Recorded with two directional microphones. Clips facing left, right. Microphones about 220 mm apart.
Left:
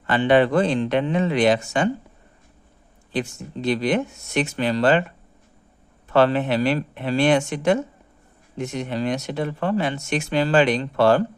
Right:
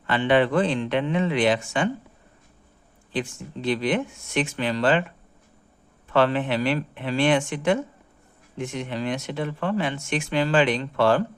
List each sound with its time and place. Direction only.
0.1 s speech: 40° left (ahead or behind)
3.1 s speech: 40° left (ahead or behind)
6.1 s speech: 40° left (ahead or behind)